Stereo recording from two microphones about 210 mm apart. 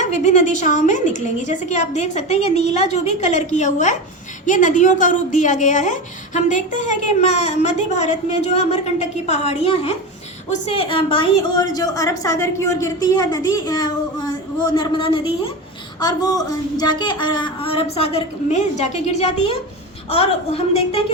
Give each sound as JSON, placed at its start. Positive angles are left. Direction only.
{"t": 0.0, "sound": "a woman's voice", "side_deg": 35}